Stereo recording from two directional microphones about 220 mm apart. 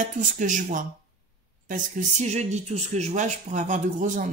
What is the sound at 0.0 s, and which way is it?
A woman's voice, 35° right (ahead or behind).